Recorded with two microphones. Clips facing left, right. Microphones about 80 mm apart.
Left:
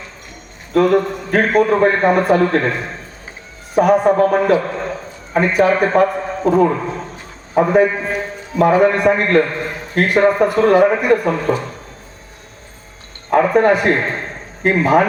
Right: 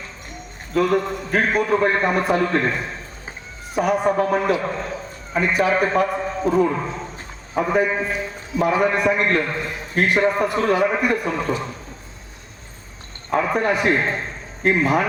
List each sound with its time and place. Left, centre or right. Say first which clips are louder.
0.8 s a man's voice: left 5 dB; left
3.8 s a man's voice: left 7 dB; left
13.3 s a man's voice: left 7 dB; left